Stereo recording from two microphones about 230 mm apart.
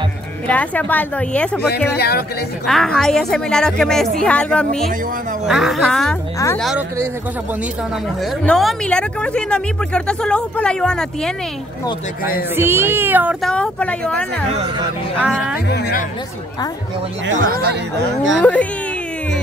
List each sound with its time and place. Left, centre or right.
0.5 s a woman's voice: centre
2.0 s speech: left
2.6 s speech: centre
8.5 s speech: centre
12.5 s speech: centre
15.1 s speech: centre
17.5 s speech: right
18.4 s speech: centre